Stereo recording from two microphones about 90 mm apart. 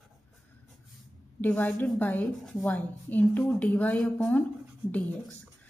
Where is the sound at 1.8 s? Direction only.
20° left (ahead or behind).